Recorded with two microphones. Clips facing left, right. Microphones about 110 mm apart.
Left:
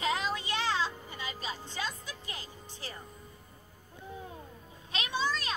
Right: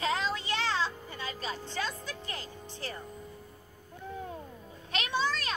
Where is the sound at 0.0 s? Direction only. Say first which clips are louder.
Right 1 dB; 15° left (ahead or behind).